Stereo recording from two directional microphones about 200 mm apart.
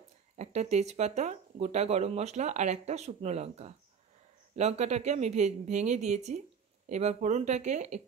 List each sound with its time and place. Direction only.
0.4 s speech: 35° right (ahead or behind)